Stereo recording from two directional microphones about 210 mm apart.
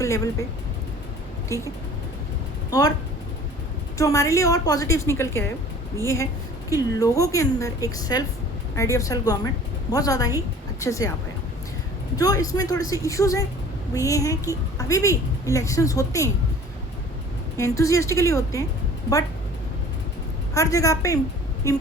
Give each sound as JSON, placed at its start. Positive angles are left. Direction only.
{"t": 0.0, "sound": "speech", "side_deg": 15}
{"t": 1.5, "sound": "a woman's voice", "side_deg": 15}
{"t": 3.9, "sound": "a woman's voice", "side_deg": 15}
{"t": 6.7, "sound": "a woman's voice", "side_deg": 15}
{"t": 12.1, "sound": "a woman's voice", "side_deg": 15}
{"t": 17.6, "sound": "a woman's voice", "side_deg": 15}
{"t": 20.5, "sound": "a woman's voice", "side_deg": 15}